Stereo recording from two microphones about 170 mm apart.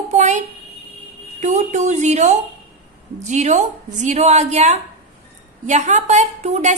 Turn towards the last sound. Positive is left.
turn(degrees=-40)  # may be behind; listen again after turning